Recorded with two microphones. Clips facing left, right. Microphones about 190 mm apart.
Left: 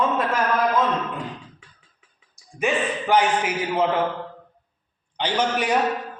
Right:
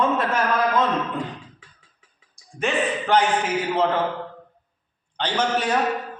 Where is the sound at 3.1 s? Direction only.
10° left (ahead or behind).